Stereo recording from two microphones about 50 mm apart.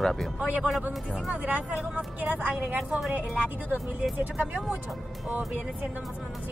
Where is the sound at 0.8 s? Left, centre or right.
Right.